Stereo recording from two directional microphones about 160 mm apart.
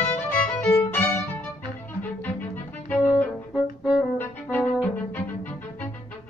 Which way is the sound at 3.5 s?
5° right (ahead or behind).